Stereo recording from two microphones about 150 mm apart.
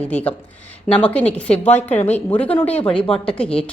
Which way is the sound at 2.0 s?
45° left (ahead or behind).